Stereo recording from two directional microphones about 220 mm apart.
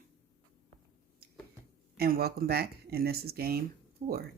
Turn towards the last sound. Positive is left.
turn(degrees=-25)  # may be behind; listen again after turning